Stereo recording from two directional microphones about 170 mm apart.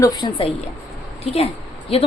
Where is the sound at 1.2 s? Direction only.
35° left (ahead or behind).